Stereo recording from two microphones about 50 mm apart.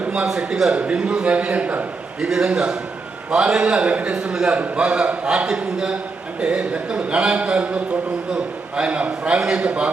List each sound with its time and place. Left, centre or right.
0.3 s a man's voice: centre; by 1.8 s right
2.2 s a man's voice: centre